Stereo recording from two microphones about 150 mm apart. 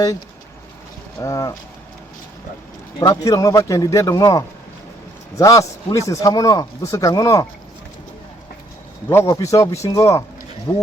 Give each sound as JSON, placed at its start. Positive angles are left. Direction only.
{"t": 1.2, "sound": "speech", "side_deg": 20}
{"t": 3.0, "sound": "speech", "side_deg": 20}
{"t": 9.0, "sound": "speech", "side_deg": 20}